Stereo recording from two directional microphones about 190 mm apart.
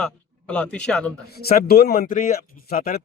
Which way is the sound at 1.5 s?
50° left (ahead or behind).